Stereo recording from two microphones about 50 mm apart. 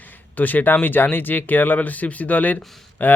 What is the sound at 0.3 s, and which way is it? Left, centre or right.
A man's voice, left.